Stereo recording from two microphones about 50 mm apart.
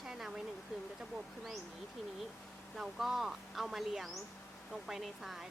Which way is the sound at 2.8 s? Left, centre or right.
Centre.